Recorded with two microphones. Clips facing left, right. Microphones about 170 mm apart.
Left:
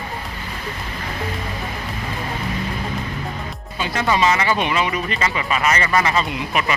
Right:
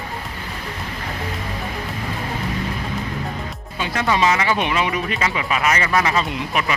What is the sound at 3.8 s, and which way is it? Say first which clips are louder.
Speech: even; centre (ahead or behind).